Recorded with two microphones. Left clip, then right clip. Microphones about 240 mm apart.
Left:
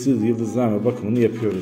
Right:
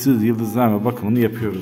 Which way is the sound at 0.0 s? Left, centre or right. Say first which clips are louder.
Right 2 dB; right.